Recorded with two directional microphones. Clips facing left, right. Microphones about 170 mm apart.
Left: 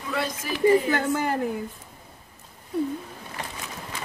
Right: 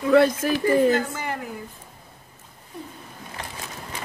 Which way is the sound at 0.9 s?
50° left (ahead or behind).